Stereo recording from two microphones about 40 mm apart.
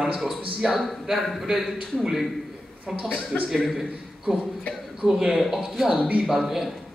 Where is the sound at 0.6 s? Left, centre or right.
Centre.